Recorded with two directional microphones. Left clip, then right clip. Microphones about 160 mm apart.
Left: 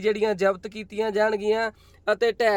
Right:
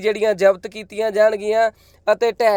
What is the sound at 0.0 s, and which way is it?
Speech, 20° right (ahead or behind).